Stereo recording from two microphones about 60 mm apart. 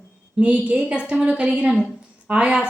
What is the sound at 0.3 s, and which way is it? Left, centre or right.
A woman's voice, right.